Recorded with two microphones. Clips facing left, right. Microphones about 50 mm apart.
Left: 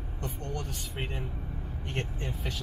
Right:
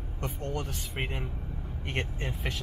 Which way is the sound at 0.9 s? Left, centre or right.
Right.